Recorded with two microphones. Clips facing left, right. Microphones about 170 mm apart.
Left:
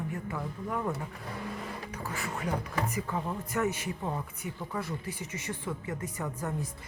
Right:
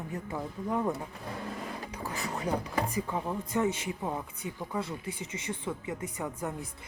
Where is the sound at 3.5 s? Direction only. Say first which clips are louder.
Right 1 dB; 25° right (ahead or behind).